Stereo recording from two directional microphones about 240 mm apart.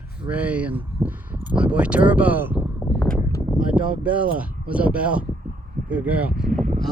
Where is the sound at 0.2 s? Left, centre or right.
Centre.